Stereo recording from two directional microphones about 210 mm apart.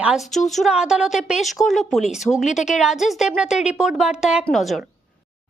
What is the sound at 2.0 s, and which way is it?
Speech, 35° left (ahead or behind).